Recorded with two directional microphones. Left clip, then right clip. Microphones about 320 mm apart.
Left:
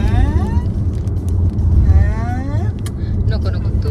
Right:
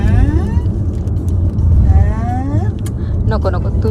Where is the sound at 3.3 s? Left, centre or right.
Centre.